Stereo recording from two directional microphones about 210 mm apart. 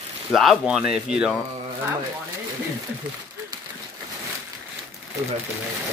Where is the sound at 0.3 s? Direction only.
Centre (ahead or behind).